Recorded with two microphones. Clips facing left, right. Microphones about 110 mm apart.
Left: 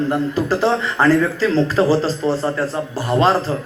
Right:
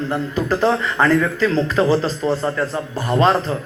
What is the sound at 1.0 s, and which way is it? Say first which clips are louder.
A man's voice: left 1 dB; 30° left (ahead or behind).